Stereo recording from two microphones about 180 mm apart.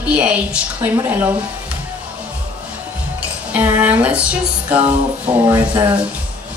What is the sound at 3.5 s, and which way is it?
Music, 10° right (ahead or behind).